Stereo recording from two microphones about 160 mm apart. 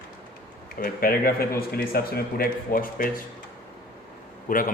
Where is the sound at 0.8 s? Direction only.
65° left (ahead or behind).